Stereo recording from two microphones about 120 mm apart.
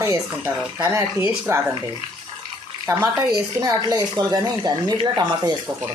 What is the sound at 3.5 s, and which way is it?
A woman's voice, 30° right (ahead or behind).